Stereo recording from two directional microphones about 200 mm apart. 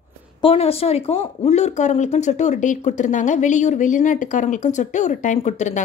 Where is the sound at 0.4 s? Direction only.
30° left (ahead or behind).